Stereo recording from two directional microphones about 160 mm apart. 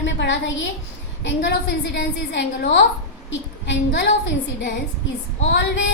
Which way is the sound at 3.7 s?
90° left.